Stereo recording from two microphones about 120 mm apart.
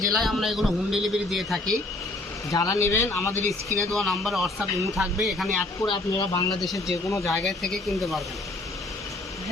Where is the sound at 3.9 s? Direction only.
Centre (ahead or behind).